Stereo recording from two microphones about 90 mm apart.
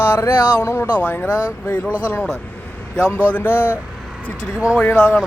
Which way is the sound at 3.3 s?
20° left (ahead or behind).